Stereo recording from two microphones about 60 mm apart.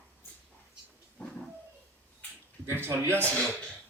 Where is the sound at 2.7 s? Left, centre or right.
Right.